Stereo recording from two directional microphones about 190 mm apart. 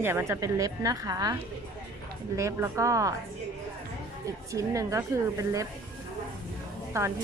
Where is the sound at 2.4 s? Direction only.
15° right (ahead or behind).